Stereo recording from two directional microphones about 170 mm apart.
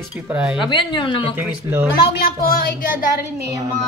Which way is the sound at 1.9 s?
65° left (ahead or behind).